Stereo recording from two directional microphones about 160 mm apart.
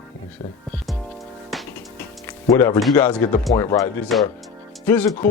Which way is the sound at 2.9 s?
10° left (ahead or behind).